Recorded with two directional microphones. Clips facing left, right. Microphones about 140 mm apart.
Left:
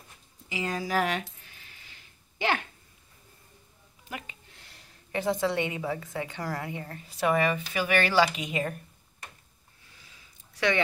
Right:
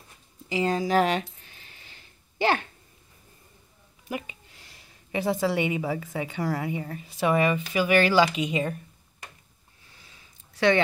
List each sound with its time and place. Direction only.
0.5 s speech: 30° right (ahead or behind)
2.3 s speech: 35° right (ahead or behind)
5.1 s a woman's voice: 10° right (ahead or behind)